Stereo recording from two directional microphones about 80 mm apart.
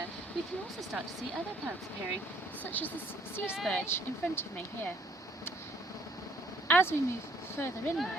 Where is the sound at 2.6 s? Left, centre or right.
Left.